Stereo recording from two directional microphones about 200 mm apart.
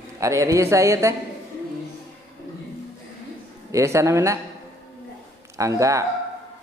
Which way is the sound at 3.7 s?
15° right (ahead or behind).